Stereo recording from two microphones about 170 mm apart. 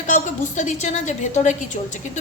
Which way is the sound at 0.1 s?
45° left (ahead or behind).